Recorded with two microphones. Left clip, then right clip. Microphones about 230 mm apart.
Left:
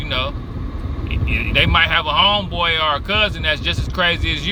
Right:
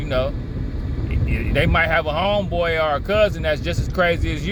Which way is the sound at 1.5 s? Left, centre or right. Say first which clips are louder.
Left 3 dB; left.